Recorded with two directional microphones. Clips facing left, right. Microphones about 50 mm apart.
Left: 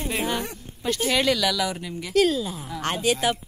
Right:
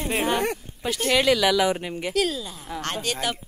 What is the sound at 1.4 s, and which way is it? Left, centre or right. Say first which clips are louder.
Speech: right 4 dB; right.